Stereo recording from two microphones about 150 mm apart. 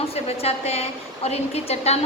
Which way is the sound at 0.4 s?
45° left (ahead or behind).